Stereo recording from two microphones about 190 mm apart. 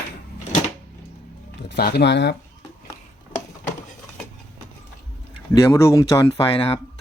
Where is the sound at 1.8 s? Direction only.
55° left (ahead or behind).